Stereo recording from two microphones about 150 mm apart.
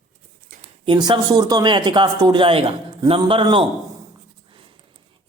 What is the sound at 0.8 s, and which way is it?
Speech, 30° right (ahead or behind).